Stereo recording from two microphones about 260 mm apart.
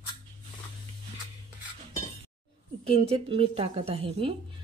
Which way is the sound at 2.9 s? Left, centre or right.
Right.